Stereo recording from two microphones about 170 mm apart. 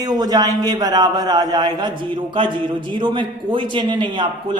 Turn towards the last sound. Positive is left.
turn(degrees=-30)  # may be behind; listen again after turning